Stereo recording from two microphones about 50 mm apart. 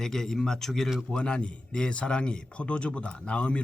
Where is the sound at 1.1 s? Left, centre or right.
Centre.